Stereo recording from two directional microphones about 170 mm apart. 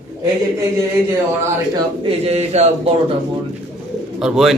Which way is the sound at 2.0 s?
35° right (ahead or behind).